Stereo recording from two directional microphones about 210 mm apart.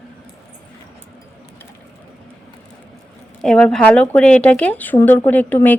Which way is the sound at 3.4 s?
5° left (ahead or behind).